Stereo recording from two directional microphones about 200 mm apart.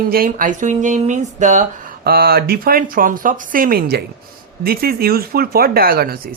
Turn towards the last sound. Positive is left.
turn(degrees=-50)  # may be behind; listen again after turning